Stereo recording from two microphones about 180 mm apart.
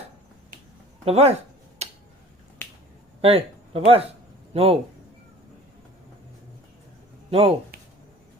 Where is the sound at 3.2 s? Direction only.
30° right (ahead or behind).